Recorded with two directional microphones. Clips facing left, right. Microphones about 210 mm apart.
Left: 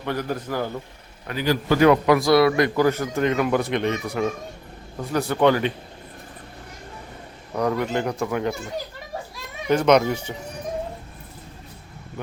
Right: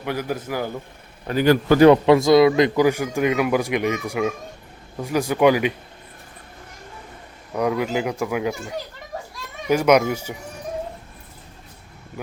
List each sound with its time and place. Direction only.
0.0 s a man's voice: 10° right (ahead or behind)
1.3 s a man's voice: 50° right (ahead or behind)
1.8 s a man's voice: 25° right (ahead or behind); by 5.7 s 10° right (ahead or behind)
7.5 s a man's voice: 5° right (ahead or behind)
9.6 s a man's voice: 10° right (ahead or behind)